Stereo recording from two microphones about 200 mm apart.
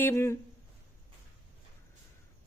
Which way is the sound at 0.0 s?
15° left (ahead or behind).